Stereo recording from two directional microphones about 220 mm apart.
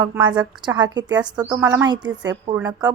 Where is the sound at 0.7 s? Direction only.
20° right (ahead or behind).